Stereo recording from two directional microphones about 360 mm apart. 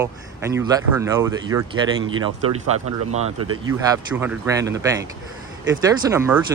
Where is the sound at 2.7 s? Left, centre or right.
Right.